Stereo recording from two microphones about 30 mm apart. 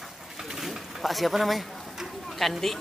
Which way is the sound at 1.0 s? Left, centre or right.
Centre.